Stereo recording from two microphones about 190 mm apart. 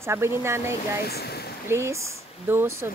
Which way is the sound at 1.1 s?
55° left (ahead or behind).